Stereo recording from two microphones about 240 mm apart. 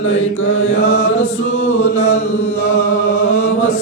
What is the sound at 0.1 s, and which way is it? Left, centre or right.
Mantra, left.